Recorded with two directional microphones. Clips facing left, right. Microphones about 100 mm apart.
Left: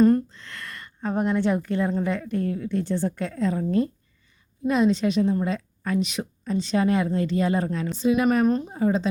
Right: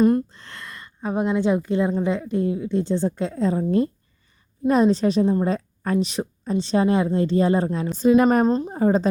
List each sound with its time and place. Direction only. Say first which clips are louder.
0.3 s a sound: even; 30° right (ahead or behind)
0.6 s a woman's voice: right 1 dB; 15° right (ahead or behind)
7.9 s a woman's voice: right 5 dB; 40° right (ahead or behind)